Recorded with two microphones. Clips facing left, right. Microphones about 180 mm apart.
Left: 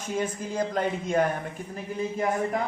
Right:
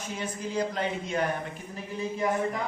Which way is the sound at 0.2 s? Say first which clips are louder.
Left 2 dB; 50° left (ahead or behind).